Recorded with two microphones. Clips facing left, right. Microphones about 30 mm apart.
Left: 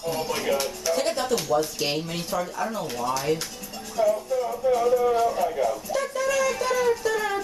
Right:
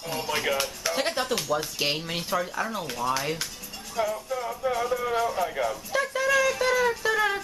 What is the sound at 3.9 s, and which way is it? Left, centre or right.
Speech, centre.